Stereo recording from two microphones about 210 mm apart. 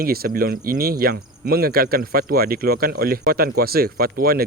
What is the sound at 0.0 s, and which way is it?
Speech, 45° right (ahead or behind).